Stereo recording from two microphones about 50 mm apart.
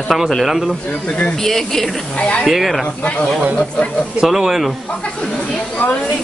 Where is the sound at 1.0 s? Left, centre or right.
Left.